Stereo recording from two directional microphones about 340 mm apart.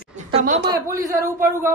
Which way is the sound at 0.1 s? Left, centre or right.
Right.